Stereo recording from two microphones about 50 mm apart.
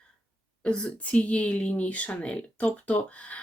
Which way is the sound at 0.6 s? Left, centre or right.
Centre.